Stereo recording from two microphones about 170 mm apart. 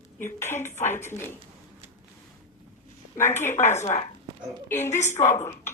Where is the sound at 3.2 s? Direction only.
15° left (ahead or behind).